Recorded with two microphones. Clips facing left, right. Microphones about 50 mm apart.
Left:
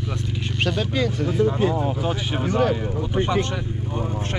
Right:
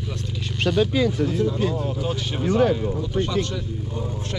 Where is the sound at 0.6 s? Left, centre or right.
Centre.